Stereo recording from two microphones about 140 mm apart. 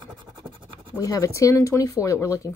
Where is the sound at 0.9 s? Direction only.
25° left (ahead or behind).